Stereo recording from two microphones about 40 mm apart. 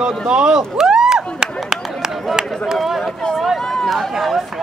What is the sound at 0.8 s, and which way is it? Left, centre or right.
Chop, centre.